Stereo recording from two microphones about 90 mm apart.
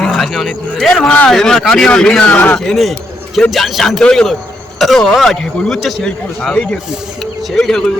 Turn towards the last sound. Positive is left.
turn(degrees=5)  # may be behind; listen again after turning